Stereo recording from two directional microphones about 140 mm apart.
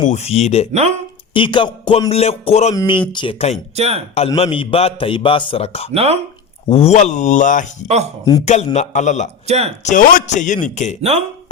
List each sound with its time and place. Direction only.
0.0 s speech: 55° left (ahead or behind)
0.7 s speech: 50° right (ahead or behind)
1.3 s music: 35° left (ahead or behind)
2.0 s speech: 50° left (ahead or behind)
2.7 s a man's voice: 35° left (ahead or behind)
3.8 s speech: 50° right (ahead or behind)
4.4 s a man's voice: 40° left (ahead or behind)
5.9 s speech: 45° right (ahead or behind)
6.7 s a man's voice: 45° left (ahead or behind); by 7.7 s 65° left (ahead or behind)
8.2 s speech: 25° left (ahead or behind)
8.4 s a man's voice: 55° left (ahead or behind)
9.5 s speech: 50° right (ahead or behind)
9.8 s a man's voice: 65° left (ahead or behind)